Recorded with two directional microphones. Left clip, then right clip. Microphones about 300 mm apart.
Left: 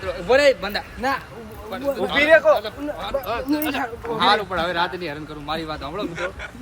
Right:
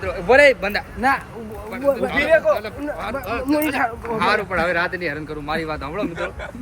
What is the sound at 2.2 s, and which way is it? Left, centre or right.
Speech, left.